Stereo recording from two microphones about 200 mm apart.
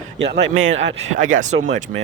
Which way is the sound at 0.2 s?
65° right (ahead or behind).